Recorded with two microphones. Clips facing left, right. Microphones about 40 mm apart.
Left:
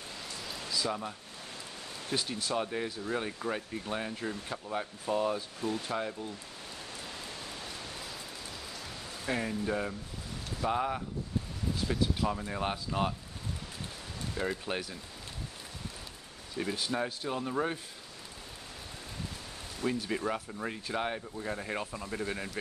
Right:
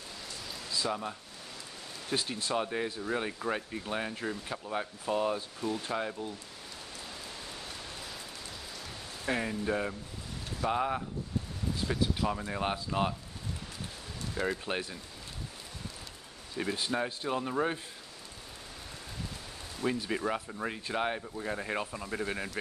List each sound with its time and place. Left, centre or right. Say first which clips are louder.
0.3 s rain on surface: left 1 dB; centre
2.0 s speech: right 1 dB; centre
9.2 s speech: right 1 dB; centre
14.4 s speech: right 1 dB; centre
16.5 s speech: right 1 dB; centre
19.8 s speech: right 1 dB; centre